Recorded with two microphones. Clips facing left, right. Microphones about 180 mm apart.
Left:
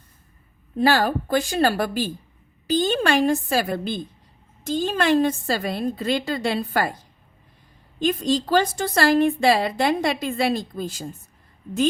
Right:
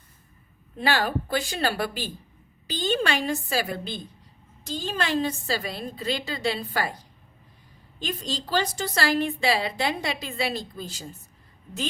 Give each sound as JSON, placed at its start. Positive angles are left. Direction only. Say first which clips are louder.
{"t": 0.8, "sound": "a woman's voice", "louder": "left 6 dB", "side_deg": 40}
{"t": 8.0, "sound": "a woman's voice", "louder": "left 10 dB", "side_deg": 50}